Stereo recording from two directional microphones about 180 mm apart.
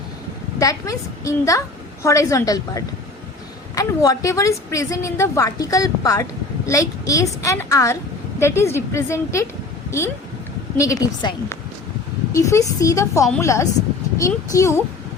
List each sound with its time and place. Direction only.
0.6 s a woman's voice: 20° left (ahead or behind)
10.8 s a woman's voice: 20° left (ahead or behind)